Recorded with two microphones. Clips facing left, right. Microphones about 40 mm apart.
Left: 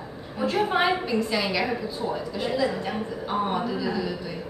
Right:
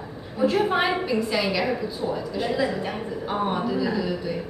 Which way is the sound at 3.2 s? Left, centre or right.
Centre.